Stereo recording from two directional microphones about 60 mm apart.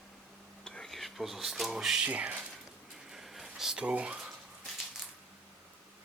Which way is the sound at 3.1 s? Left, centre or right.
Centre.